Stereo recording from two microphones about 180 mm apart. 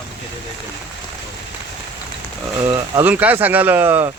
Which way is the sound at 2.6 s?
15° right (ahead or behind).